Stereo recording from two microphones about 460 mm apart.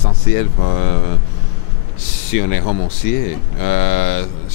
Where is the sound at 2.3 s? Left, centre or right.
Left.